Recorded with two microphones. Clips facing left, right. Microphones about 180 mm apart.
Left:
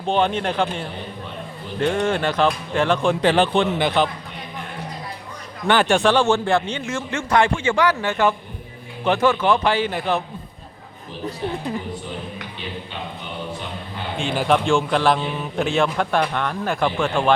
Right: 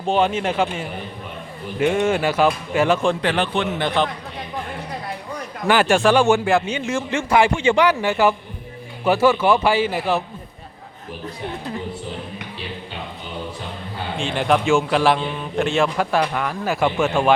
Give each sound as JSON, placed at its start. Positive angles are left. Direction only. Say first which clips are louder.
{"t": 0.0, "sound": "a man's voice", "louder": "right 1 dB", "side_deg": -5}
{"t": 3.2, "sound": "speech", "louder": "left 4 dB", "side_deg": 25}
{"t": 3.8, "sound": "a man's voice", "louder": "left 1 dB", "side_deg": 5}
{"t": 5.6, "sound": "a man's voice", "louder": "right 1 dB", "side_deg": -5}
{"t": 14.2, "sound": "a man's voice", "louder": "even", "side_deg": 0}